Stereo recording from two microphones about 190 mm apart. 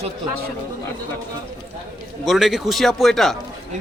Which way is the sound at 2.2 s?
Centre (ahead or behind).